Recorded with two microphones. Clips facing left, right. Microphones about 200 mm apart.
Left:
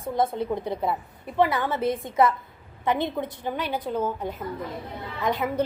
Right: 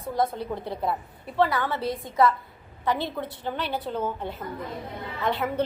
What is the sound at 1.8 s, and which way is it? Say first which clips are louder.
Speech: left 4 dB; 50° left (ahead or behind).